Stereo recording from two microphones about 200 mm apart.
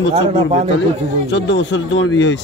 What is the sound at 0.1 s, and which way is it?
Speech, 30° right (ahead or behind).